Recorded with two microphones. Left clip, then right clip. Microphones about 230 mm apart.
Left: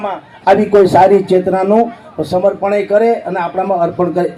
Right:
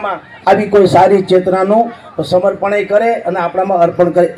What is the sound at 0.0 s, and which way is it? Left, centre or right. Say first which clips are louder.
A man's voice: even; right.